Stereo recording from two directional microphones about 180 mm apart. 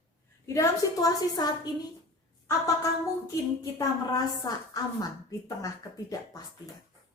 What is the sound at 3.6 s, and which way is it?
A woman's voice, 20° left (ahead or behind).